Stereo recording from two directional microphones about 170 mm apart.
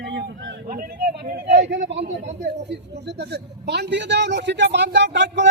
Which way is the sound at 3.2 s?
75° right (ahead or behind).